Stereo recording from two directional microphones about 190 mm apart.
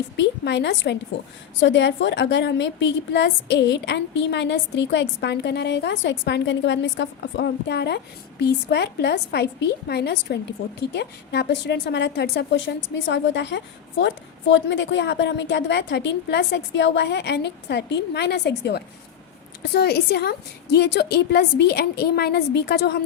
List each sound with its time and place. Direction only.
0.2 s a woman's voice: 65° left (ahead or behind)